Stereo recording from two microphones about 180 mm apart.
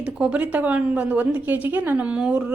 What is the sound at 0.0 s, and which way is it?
A woman's voice, 5° right (ahead or behind).